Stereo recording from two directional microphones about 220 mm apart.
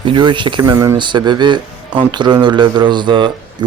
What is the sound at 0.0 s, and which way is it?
Speech, 20° right (ahead or behind).